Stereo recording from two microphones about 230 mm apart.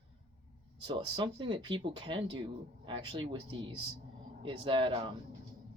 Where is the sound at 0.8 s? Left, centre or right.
Right.